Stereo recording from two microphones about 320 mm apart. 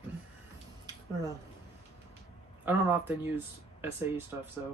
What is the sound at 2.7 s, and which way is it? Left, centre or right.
Speech, centre.